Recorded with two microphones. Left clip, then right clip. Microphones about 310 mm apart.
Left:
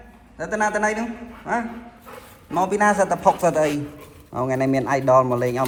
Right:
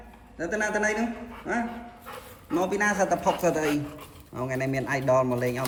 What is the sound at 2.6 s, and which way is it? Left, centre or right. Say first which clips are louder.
Speech: left 6 dB; centre.